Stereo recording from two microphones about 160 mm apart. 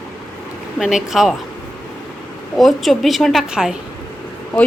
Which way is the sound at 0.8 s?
5° right (ahead or behind).